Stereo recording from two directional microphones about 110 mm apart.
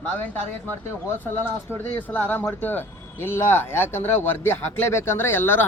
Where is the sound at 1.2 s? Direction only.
20° left (ahead or behind).